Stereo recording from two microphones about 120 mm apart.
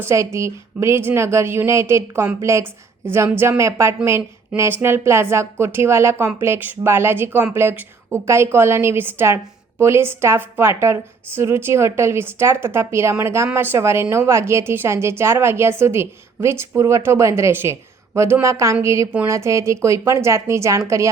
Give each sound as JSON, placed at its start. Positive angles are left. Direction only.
{"t": 0.0, "sound": "a woman's voice", "side_deg": -20}